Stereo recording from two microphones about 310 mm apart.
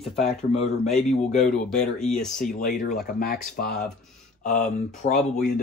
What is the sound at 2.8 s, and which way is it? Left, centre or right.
Speech, left.